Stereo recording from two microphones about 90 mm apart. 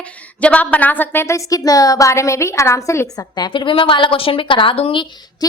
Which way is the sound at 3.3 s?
55° left (ahead or behind).